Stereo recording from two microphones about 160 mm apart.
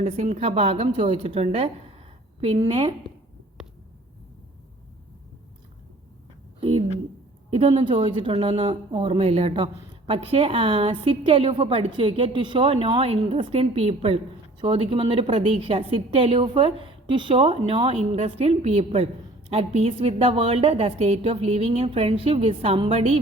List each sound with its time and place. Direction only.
0.0 s a woman's voice: 40° right (ahead or behind)
6.6 s a sound: 35° right (ahead or behind)
7.5 s a woman's voice: 35° right (ahead or behind)